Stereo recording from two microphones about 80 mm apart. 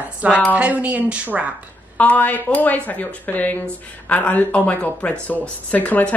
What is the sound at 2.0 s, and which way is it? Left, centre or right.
Speech, left.